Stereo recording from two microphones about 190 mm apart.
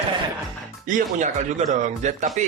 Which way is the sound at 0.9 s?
45° right (ahead or behind).